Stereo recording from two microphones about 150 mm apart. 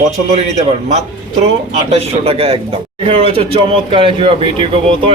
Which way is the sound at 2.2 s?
40° right (ahead or behind).